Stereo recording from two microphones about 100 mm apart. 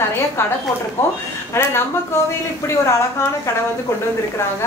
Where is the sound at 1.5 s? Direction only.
25° left (ahead or behind).